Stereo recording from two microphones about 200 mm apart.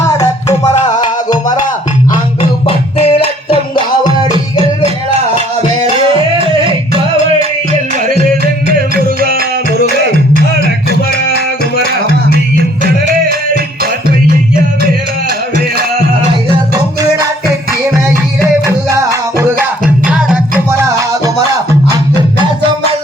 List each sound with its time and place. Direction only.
0.0 s music: 15° left (ahead or behind)
0.8 s music: 35° left (ahead or behind)
2.4 s music: 30° left (ahead or behind)
12.8 s music: 45° right (ahead or behind)
20.1 s music: 5° right (ahead or behind)